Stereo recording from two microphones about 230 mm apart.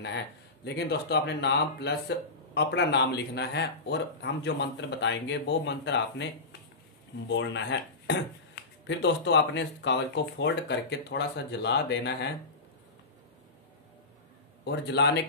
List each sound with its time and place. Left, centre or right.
0.7 s speech: left
7.2 s speech: left
14.6 s speech: left